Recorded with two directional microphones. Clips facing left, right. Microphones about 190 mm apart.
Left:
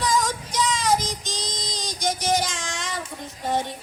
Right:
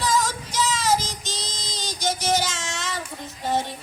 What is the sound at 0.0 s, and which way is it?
Child singing, 5° right (ahead or behind).